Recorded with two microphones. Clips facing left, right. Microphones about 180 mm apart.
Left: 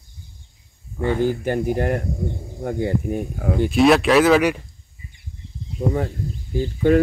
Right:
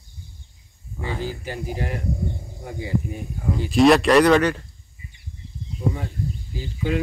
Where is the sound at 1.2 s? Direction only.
55° left (ahead or behind).